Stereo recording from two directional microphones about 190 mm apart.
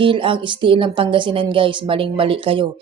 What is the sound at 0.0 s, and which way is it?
A woman's voice, 25° right (ahead or behind).